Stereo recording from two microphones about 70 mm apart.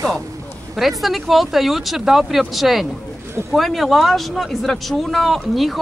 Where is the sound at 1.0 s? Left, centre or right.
Centre.